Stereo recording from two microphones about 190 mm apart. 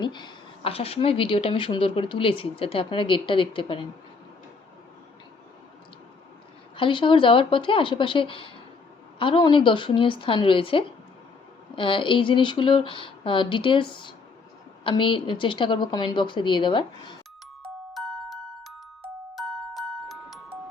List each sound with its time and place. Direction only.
0.0 s speech: 25° left (ahead or behind)
6.7 s speech: 25° left (ahead or behind)
17.9 s glockenspiel: centre (ahead or behind)